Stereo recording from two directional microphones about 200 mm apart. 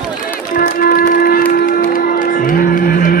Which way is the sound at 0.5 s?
45° left (ahead or behind).